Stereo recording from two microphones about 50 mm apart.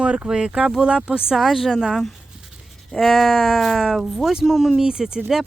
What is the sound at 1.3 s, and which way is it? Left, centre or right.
Speech, centre.